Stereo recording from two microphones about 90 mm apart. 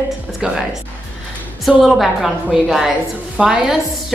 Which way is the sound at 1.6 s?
Centre (ahead or behind).